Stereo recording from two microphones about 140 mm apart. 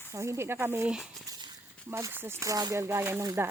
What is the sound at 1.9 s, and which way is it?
Speech, 20° right (ahead or behind).